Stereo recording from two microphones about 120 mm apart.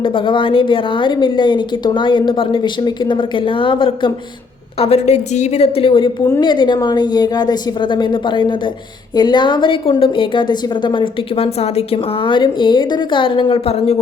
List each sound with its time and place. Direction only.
0.0 s a woman's voice: 45° left (ahead or behind)
4.8 s a woman's voice: 60° left (ahead or behind)